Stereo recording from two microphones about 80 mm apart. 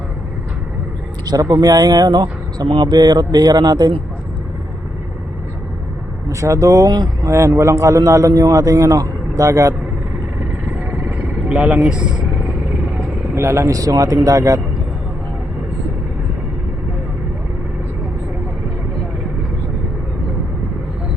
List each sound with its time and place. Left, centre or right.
1.2 s speech: right
2.0 s a man's voice: right
6.2 s a man's voice: right
6.9 s speech: right
7.3 s a man's voice: right
10.7 s vehicle: right
11.8 s speech: centre
13.3 s a man's voice: right